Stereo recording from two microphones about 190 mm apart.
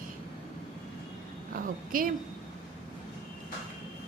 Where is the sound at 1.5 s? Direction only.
45° right (ahead or behind).